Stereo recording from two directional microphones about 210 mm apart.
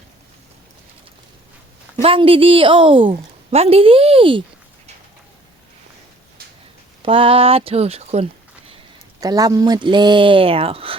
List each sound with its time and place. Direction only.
2.0 s a woman's voice: 25° right (ahead or behind)
7.0 s a woman's voice: 25° right (ahead or behind)
9.2 s a woman's voice: 15° right (ahead or behind)